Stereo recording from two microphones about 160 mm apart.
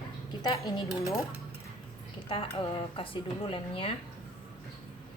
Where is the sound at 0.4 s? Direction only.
25° left (ahead or behind).